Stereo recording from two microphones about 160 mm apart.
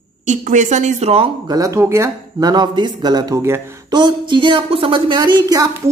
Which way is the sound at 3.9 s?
30° right (ahead or behind).